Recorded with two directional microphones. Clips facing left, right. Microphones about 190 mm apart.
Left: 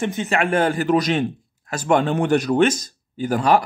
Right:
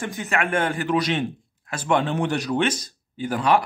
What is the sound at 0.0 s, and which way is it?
Speech, 25° left (ahead or behind).